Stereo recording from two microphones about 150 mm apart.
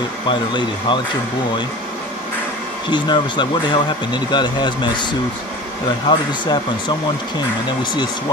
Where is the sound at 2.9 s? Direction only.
30° left (ahead or behind).